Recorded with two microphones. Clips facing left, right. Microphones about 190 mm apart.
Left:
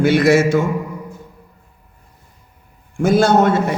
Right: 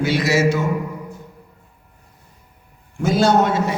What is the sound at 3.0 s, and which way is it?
Speech, 50° left (ahead or behind).